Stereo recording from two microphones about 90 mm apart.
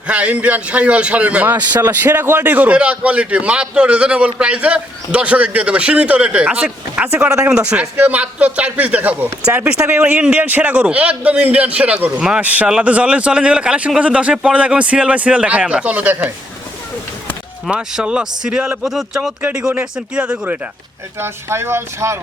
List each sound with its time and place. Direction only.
0.1 s a man's voice: 15° right (ahead or behind)
17.7 s a man's voice: 10° right (ahead or behind)
19.8 s a man's voice: 15° right (ahead or behind)